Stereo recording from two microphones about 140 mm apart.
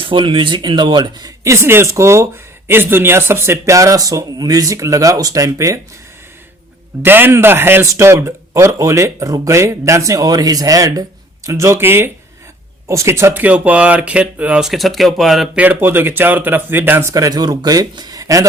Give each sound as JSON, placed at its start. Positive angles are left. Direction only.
{"t": 0.0, "sound": "speech", "side_deg": -35}
{"t": 1.5, "sound": "speech", "side_deg": -15}
{"t": 7.0, "sound": "speech", "side_deg": -15}
{"t": 15.6, "sound": "speech", "side_deg": -15}